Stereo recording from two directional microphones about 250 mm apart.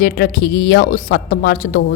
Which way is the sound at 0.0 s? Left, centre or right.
Left.